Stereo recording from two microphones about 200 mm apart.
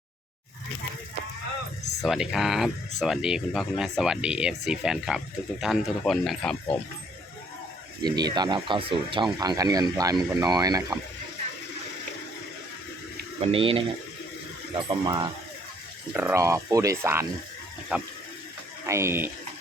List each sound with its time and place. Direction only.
2.0 s speech: centre (ahead or behind)
8.0 s speech: 20° right (ahead or behind)
13.4 s speech: 30° right (ahead or behind); by 19.3 s 10° right (ahead or behind)